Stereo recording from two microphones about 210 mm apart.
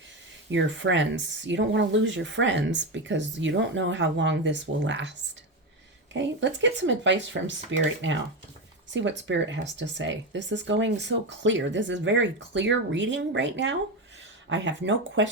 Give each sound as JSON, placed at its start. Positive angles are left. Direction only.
{"t": 0.5, "sound": "speech", "side_deg": -60}
{"t": 6.1, "sound": "speech", "side_deg": -60}